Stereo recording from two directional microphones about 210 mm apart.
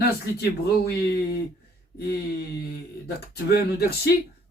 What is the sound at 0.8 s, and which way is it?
Speech, 50° left (ahead or behind).